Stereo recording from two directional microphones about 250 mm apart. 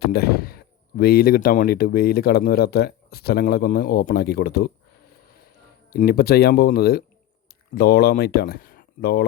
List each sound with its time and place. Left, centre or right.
0.0 s speech: left
5.9 s speech: left